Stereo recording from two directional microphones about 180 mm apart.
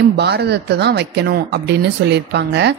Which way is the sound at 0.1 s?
65° right (ahead or behind).